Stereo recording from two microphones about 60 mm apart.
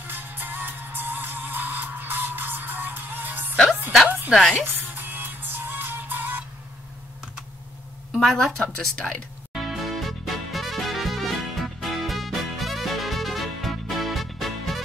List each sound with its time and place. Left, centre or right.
0.0 s music: right
4.3 s speech: centre
4.6 s music: right
8.2 s speech: centre
9.5 s music: centre